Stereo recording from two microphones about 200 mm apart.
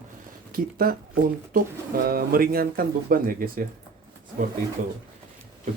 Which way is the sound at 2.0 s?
50° right (ahead or behind).